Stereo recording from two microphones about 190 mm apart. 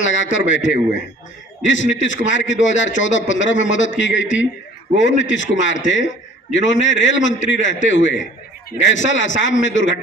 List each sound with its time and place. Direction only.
0.0 s a man's voice: 80° left